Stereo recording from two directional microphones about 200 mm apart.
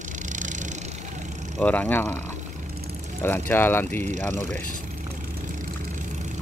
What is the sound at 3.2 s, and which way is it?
Speech, 10° left (ahead or behind).